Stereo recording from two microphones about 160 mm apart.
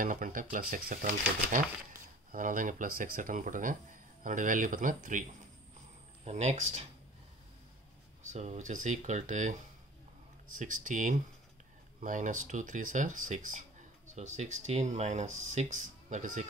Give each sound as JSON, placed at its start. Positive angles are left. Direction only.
{"t": 0.0, "sound": "speech", "side_deg": -60}
{"t": 6.2, "sound": "speech", "side_deg": -45}
{"t": 8.3, "sound": "speech", "side_deg": -45}